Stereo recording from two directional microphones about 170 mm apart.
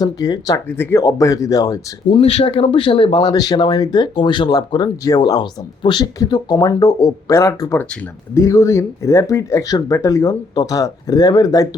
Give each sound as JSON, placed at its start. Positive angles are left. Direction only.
{"t": 0.0, "sound": "speech", "side_deg": 20}